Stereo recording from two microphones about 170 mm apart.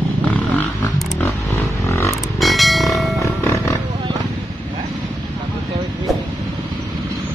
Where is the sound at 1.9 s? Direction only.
15° left (ahead or behind).